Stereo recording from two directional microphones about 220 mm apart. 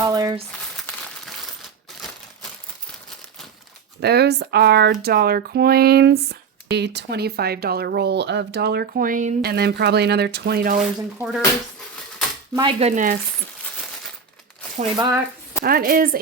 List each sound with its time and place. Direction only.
0.0 s crumpling: 15° right (ahead or behind)
0.8 s crumpling: centre (ahead or behind)
4.0 s speech: 45° right (ahead or behind)
10.8 s speech: 5° right (ahead or behind)
12.5 s speech: 20° right (ahead or behind)
13.7 s a sound: centre (ahead or behind)
14.9 s speech: 15° right (ahead or behind)
15.6 s a woman's voice: 40° right (ahead or behind)